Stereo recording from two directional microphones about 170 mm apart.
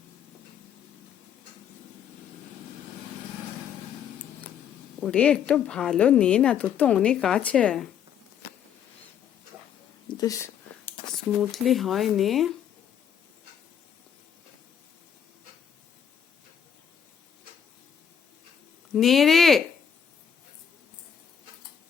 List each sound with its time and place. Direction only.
4.2 s a sound: 10° left (ahead or behind)
4.9 s speech: 5° left (ahead or behind)
10.1 s speech: 20° left (ahead or behind)
11.3 s speech: centre (ahead or behind)
18.9 s speech: centre (ahead or behind)